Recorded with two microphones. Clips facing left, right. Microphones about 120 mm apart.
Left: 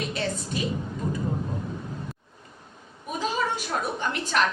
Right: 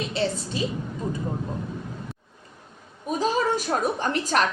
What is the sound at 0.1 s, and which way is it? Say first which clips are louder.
Speech: right 3 dB; 30° right (ahead or behind).